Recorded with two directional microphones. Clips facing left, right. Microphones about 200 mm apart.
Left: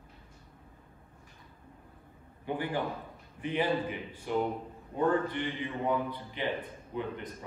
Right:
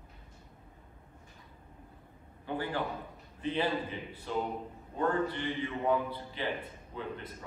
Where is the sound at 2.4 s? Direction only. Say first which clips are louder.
Left 2 dB; 20° left (ahead or behind).